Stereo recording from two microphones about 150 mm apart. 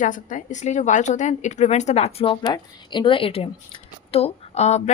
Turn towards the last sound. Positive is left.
turn(degrees=45)  # may be behind; listen again after turning